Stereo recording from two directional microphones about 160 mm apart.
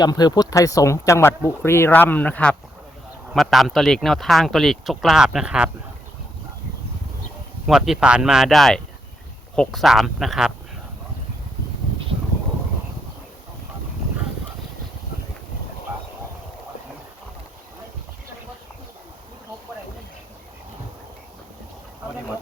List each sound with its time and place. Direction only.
0.0 s speech: 25° left (ahead or behind); by 5.7 s 5° right (ahead or behind)
7.7 s speech: 5° right (ahead or behind)